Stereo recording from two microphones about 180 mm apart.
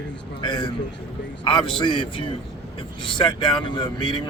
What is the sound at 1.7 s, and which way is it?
Speech, 25° left (ahead or behind).